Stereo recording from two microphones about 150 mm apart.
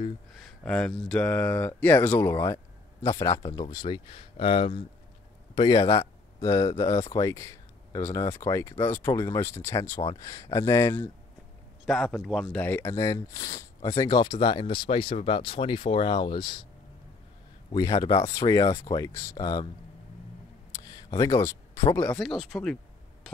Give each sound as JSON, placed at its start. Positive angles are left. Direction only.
{"t": 0.7, "sound": "a man's voice", "side_deg": 5}
{"t": 11.8, "sound": "a man's voice", "side_deg": 0}
{"t": 12.5, "sound": "speech", "side_deg": 10}
{"t": 17.7, "sound": "speech", "side_deg": 25}
{"t": 20.8, "sound": "speech", "side_deg": 25}
{"t": 22.2, "sound": "a man's voice", "side_deg": 0}